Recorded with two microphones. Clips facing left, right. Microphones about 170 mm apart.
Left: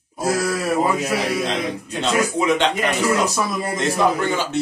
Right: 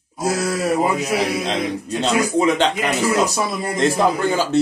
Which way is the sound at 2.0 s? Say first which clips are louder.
Right 2 dB; 35° right (ahead or behind).